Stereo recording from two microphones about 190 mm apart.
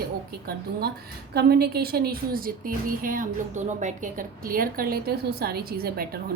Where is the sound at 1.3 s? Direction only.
55° right (ahead or behind).